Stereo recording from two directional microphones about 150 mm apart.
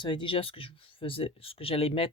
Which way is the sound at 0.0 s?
30° left (ahead or behind).